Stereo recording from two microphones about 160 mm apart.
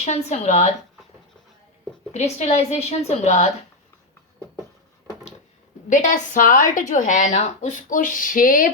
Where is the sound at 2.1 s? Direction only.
45° left (ahead or behind).